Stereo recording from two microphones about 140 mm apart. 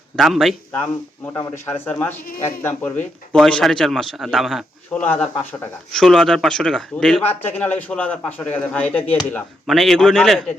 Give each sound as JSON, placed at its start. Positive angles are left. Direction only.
{"t": 0.2, "sound": "a man's voice", "side_deg": 0}
{"t": 0.8, "sound": "speech", "side_deg": 20}
{"t": 3.3, "sound": "a man's voice", "side_deg": 0}